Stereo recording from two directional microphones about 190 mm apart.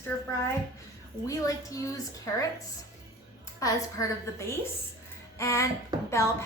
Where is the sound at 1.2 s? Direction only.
15° left (ahead or behind).